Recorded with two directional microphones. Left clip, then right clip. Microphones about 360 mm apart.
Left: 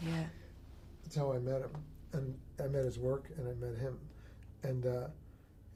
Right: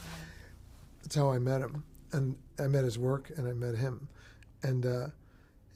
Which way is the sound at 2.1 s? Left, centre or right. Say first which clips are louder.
Right 6 dB; right.